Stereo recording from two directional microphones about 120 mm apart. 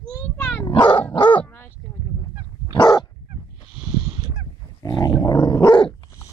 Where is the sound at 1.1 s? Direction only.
40° left (ahead or behind).